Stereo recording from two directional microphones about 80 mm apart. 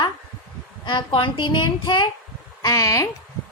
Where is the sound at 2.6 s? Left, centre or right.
Left.